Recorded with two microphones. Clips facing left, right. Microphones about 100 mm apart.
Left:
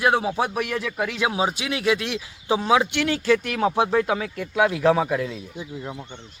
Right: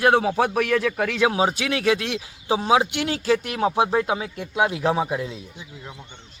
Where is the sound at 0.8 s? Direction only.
55° right (ahead or behind); by 2.0 s 40° right (ahead or behind).